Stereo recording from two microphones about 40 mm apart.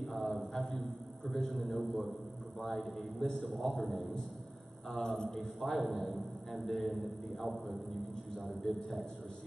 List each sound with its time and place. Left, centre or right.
0.0 s a sound: centre
2.6 s a man's voice: centre
5.0 s a man's voice: centre
5.3 s a man's voice: centre